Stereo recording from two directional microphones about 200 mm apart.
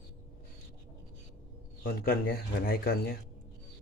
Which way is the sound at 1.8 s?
50° left (ahead or behind).